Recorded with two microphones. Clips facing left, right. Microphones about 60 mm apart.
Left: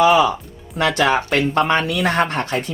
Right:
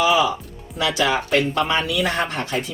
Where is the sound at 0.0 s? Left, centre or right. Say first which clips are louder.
Left 4 dB; left.